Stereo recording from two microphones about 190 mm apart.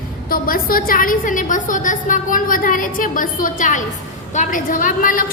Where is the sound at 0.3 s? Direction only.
50° left (ahead or behind).